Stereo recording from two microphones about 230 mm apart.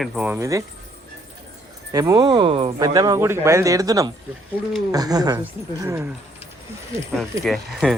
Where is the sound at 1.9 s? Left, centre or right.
Centre.